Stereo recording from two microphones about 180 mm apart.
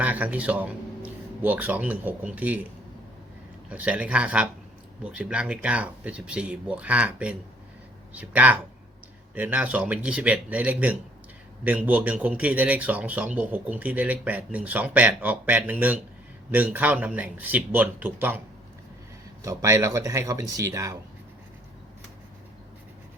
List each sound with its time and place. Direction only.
0.0 s speech: 10° right (ahead or behind)
3.7 s a man's voice: 5° right (ahead or behind)
19.4 s a man's voice: 15° right (ahead or behind)